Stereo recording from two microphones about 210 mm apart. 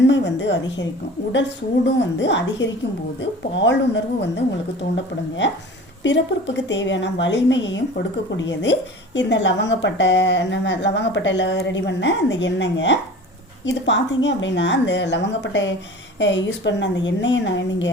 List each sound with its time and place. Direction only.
0.0 s a woman's voice: 55° left (ahead or behind)
2.0 s a woman's voice: 55° left (ahead or behind)